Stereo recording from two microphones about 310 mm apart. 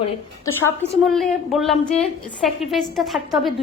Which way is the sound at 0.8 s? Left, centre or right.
Centre.